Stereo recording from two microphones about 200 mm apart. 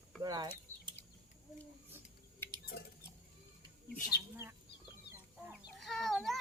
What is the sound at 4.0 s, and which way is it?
Bird, 50° left (ahead or behind).